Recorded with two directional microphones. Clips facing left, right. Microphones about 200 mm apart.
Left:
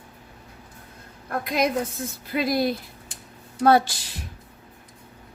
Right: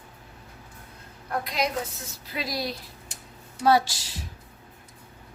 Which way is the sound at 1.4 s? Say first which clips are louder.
Left 7 dB; 55° left (ahead or behind).